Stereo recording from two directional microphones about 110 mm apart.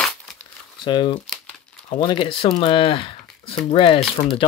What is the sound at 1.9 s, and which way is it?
Speech, 50° left (ahead or behind).